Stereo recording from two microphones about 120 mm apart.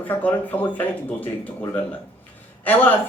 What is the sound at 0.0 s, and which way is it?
Speech, 15° left (ahead or behind).